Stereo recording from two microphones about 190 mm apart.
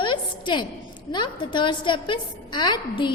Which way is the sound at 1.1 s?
25° left (ahead or behind).